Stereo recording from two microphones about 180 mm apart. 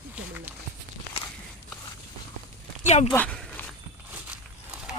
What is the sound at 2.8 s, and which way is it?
Speech, 40° left (ahead or behind).